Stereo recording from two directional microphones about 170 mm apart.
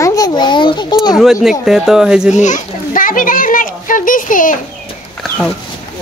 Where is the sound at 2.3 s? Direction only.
45° left (ahead or behind).